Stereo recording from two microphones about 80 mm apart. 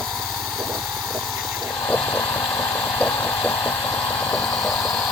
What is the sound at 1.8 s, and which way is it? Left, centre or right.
Vehicle, centre.